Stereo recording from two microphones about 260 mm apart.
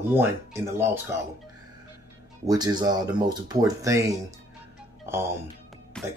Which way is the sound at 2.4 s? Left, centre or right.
Centre.